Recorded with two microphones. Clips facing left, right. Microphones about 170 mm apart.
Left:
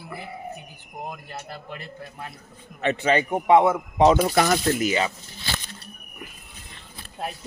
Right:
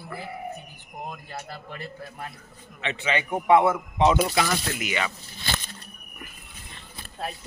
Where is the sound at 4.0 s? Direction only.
40° left (ahead or behind).